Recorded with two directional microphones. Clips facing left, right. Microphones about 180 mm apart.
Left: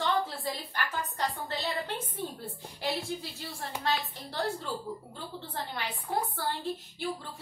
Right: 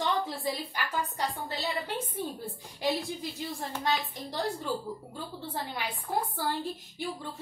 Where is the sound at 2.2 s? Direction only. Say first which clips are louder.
Right 1 dB; 15° right (ahead or behind).